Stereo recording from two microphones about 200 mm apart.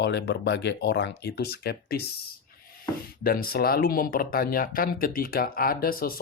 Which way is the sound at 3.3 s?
50° left (ahead or behind).